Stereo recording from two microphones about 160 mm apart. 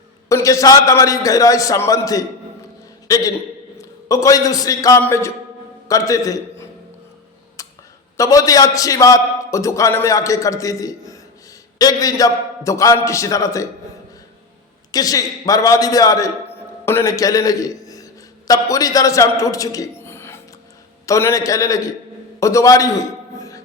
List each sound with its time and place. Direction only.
0.3 s a man's voice: 20° left (ahead or behind)
8.1 s a man's voice: 20° left (ahead or behind)
14.9 s a man's voice: 20° left (ahead or behind)